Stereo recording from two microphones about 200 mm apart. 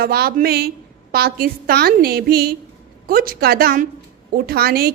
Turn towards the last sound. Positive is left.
turn(degrees=-50)  # may be behind; listen again after turning